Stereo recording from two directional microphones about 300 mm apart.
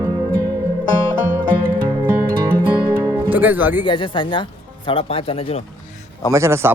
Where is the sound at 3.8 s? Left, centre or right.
Centre.